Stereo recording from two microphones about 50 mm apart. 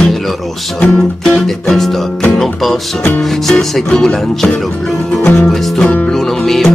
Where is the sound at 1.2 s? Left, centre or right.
Centre.